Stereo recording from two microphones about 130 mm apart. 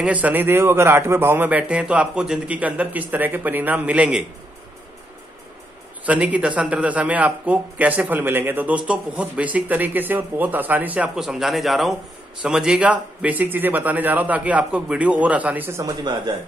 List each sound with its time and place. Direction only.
0.0 s a man's voice: 10° right (ahead or behind)
6.0 s a man's voice: 10° right (ahead or behind)
15.8 s speech: 35° right (ahead or behind)